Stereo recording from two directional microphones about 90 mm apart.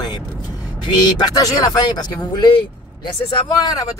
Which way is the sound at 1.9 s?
50° left (ahead or behind).